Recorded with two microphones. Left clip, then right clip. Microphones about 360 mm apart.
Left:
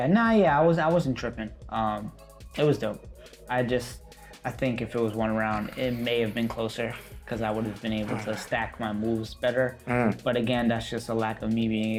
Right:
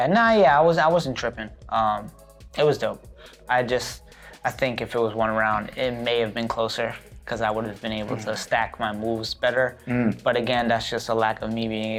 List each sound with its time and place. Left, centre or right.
0.0 s speech: right
9.8 s speech: left
10.2 s speech: right